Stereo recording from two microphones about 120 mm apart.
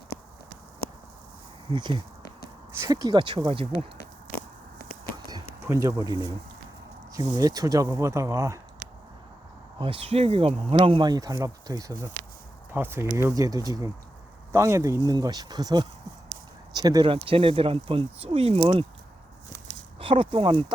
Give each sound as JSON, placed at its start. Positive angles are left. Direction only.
{"t": 1.7, "sound": "speech", "side_deg": -40}
{"t": 5.6, "sound": "speech", "side_deg": -25}
{"t": 9.7, "sound": "speech", "side_deg": -45}
{"t": 11.1, "sound": "speech", "side_deg": -30}
{"t": 12.7, "sound": "speech", "side_deg": -20}
{"t": 17.1, "sound": "speech", "side_deg": -50}
{"t": 20.0, "sound": "speech", "side_deg": -50}